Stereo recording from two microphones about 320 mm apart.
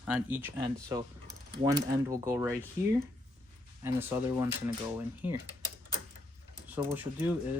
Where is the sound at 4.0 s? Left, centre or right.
Centre.